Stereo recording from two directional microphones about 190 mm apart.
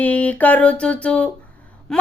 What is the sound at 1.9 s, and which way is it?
Gasp, 5° left (ahead or behind).